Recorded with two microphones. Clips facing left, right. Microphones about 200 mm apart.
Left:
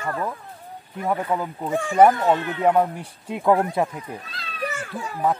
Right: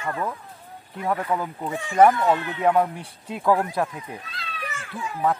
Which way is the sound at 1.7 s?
50° left (ahead or behind).